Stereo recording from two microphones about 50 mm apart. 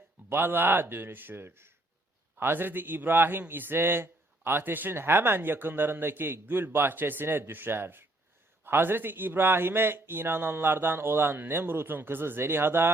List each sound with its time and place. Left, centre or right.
0.3 s a man's voice: right
2.4 s a man's voice: right